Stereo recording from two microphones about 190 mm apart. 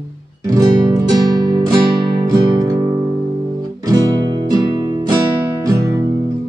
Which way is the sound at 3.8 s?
20° right (ahead or behind).